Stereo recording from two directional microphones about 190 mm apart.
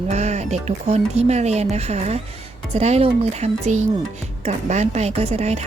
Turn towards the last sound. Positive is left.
turn(degrees=-35)  # may be behind; listen again after turning